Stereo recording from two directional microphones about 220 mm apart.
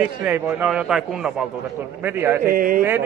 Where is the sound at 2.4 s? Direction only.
40° right (ahead or behind).